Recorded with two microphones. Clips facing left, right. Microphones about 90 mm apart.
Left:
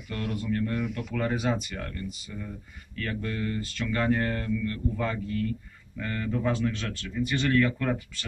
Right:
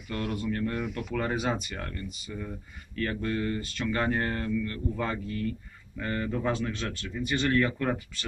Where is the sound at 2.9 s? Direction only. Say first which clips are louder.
Right 2 dB; 30° right (ahead or behind).